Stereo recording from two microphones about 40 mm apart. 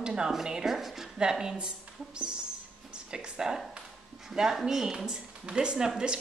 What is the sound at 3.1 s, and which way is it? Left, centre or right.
A woman's voice, centre.